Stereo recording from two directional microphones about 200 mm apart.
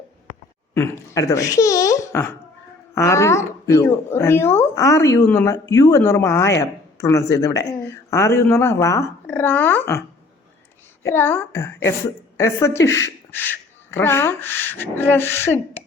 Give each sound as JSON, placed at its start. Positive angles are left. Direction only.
{"t": 0.7, "sound": "speech", "side_deg": 15}
{"t": 11.0, "sound": "speech", "side_deg": 10}